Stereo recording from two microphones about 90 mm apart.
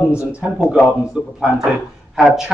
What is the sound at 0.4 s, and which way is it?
Speech, 15° right (ahead or behind).